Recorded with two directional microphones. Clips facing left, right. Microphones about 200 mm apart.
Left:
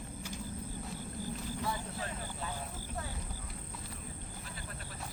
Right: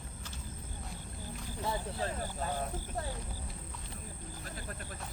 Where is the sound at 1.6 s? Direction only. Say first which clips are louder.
Right 7 dB; 25° right (ahead or behind).